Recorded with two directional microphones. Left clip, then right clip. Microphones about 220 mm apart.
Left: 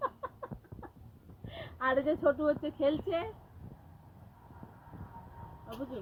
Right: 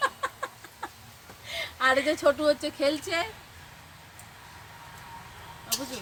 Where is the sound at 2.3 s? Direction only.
35° right (ahead or behind).